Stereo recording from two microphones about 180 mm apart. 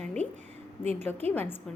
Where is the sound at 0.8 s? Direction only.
35° right (ahead or behind).